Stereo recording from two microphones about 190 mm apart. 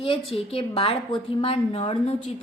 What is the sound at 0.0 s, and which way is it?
A woman's voice, 30° left (ahead or behind).